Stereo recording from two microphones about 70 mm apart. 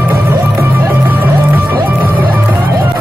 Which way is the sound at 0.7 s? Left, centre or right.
Right.